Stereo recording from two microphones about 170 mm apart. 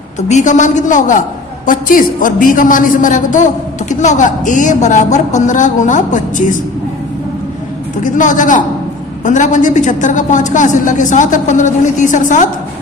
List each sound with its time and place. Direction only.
0.2 s a man's voice: 45° left (ahead or behind)
8.0 s a man's voice: 50° left (ahead or behind)